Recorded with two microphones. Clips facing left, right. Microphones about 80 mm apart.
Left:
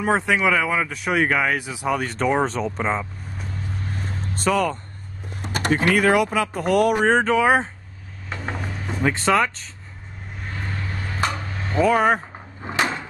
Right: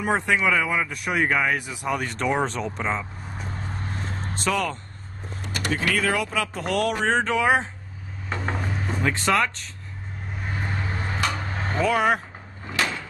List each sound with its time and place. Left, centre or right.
0.0 s speech: centre
4.5 s speech: centre
5.5 s a sound: left
6.3 s speech: centre
8.3 s mechanisms: centre
9.0 s speech: centre
10.5 s vehicle: centre
11.3 s a sound: right
11.8 s speech: centre
12.6 s door: left